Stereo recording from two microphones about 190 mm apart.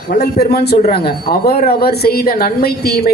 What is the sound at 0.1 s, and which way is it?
A man's voice, 55° left (ahead or behind).